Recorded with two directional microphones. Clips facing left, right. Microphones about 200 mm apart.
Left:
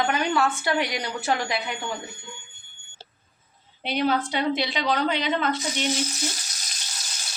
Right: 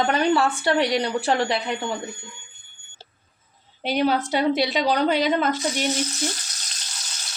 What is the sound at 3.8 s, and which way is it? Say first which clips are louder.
A woman's voice: right 3 dB; 40° right (ahead or behind).